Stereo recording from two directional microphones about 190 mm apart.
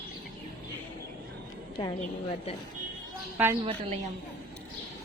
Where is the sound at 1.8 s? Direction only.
30° left (ahead or behind).